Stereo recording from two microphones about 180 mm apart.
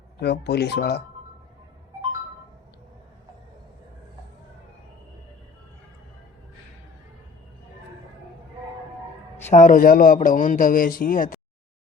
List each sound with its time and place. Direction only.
0.2 s speech: 65° left (ahead or behind)
9.5 s speech: 45° left (ahead or behind)